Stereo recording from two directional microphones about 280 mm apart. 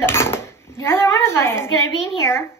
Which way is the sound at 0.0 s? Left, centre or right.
Centre.